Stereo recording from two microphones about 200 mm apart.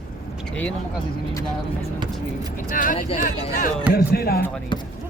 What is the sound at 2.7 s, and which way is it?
Speech, 40° left (ahead or behind).